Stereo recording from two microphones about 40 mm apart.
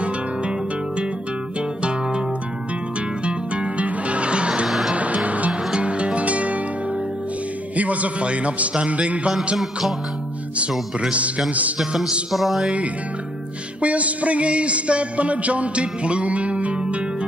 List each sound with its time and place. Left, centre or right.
3.3 s music: right
4.6 s music: centre
4.9 s music: right
5.5 s music: right
7.7 s a man's voice: right
11.0 s a man's voice: right
12.3 s music: centre
13.7 s music: right